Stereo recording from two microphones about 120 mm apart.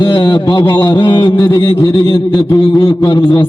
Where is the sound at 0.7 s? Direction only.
40° left (ahead or behind).